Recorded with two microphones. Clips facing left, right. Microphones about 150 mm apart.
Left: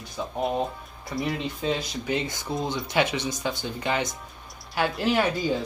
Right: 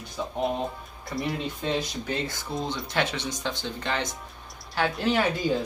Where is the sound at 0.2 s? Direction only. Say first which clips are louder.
Left 1 dB; 5° left (ahead or behind).